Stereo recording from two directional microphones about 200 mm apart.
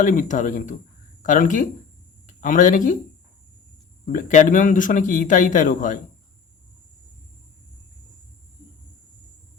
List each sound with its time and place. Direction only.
0.0 s a man's voice: 40° left (ahead or behind)
4.0 s a man's voice: 40° left (ahead or behind)